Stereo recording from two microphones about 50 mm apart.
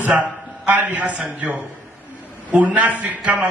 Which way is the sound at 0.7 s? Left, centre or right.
Right.